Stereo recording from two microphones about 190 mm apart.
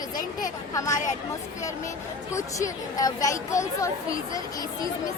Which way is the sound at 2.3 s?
15° left (ahead or behind).